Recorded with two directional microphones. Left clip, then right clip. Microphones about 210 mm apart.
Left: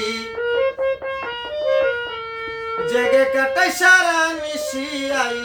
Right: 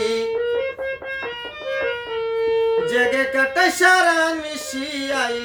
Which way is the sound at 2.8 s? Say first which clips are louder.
Left 3 dB; 15° left (ahead or behind).